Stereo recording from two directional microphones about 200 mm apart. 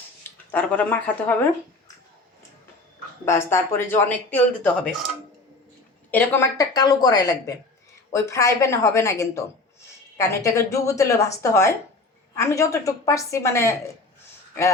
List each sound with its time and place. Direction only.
0.5 s speech: 10° left (ahead or behind)
3.2 s speech: 10° left (ahead or behind)
6.1 s speech: 10° left (ahead or behind)